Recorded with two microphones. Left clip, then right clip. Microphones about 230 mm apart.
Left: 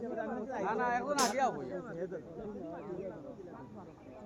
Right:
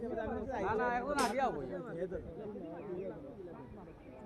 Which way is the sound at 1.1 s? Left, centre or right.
Left.